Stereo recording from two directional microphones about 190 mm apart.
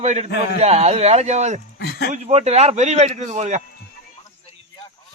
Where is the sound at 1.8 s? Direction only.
55° left (ahead or behind).